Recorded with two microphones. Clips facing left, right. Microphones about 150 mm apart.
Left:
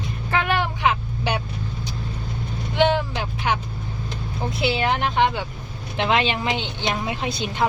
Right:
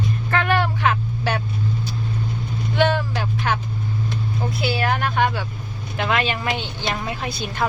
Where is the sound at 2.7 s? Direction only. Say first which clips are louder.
Left 1 dB; 15° left (ahead or behind).